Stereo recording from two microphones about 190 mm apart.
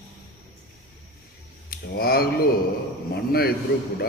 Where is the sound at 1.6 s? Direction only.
50° left (ahead or behind).